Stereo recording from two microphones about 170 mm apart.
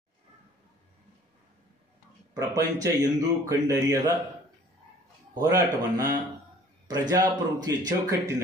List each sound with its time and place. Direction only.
2.3 s speech: 20° right (ahead or behind)
5.3 s speech: 25° right (ahead or behind)